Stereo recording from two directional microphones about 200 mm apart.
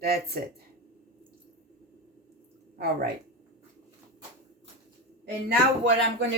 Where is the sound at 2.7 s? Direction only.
55° right (ahead or behind).